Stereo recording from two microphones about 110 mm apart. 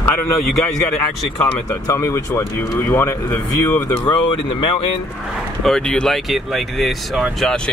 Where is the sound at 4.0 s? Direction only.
40° left (ahead or behind).